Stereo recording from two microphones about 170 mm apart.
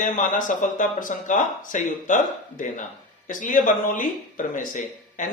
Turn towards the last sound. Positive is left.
turn(degrees=50)  # may be behind; listen again after turning